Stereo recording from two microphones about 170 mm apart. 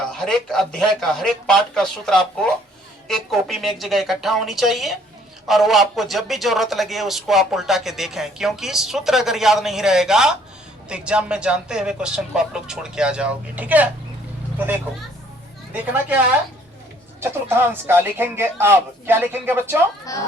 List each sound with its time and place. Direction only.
0.1 s speech: centre (ahead or behind)
15.7 s speech: 10° right (ahead or behind)
20.1 s speech: 20° left (ahead or behind)